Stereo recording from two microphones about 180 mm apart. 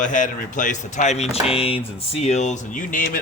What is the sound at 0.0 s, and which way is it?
A man's voice, 45° left (ahead or behind).